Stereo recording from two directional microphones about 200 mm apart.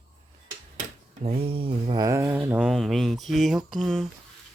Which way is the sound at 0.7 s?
30° right (ahead or behind).